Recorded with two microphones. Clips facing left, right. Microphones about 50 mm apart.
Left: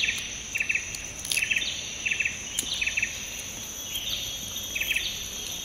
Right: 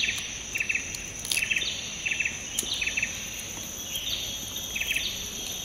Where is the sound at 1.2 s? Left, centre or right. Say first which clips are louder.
Left 1 dB; centre.